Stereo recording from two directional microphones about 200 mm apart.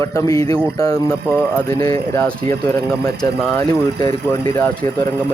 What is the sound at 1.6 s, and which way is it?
Speech, 20° left (ahead or behind).